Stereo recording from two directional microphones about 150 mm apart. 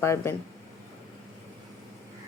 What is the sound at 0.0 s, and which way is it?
Speech, 20° left (ahead or behind).